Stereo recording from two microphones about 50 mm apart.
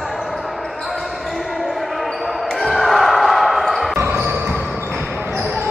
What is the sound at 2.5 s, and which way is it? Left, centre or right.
Basketball bounce, centre.